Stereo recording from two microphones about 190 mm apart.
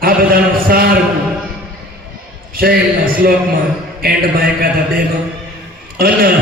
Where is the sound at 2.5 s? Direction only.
50° right (ahead or behind).